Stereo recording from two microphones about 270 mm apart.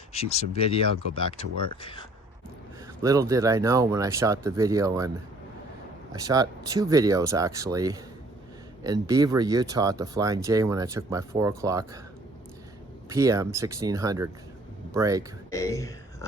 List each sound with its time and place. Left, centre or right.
0.1 s speech: left
3.0 s speech: centre
13.1 s speech: centre
15.4 s speech: centre